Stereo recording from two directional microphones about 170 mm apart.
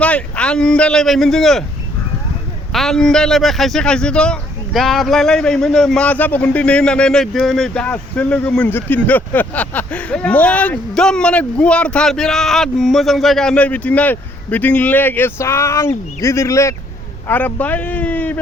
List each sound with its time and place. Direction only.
0.0 s speech: 5° left (ahead or behind)
2.7 s speech: centre (ahead or behind)